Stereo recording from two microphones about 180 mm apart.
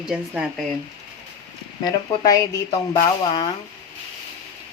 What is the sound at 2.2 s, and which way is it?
Speech, 20° left (ahead or behind).